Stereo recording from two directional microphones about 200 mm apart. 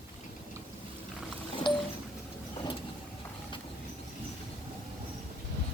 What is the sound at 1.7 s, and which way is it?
Music, 20° left (ahead or behind).